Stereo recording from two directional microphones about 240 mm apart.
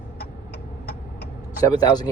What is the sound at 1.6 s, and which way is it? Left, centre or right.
Speech, centre.